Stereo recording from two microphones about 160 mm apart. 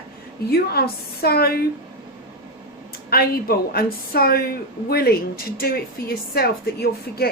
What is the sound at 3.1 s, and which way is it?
Speech, 70° left (ahead or behind).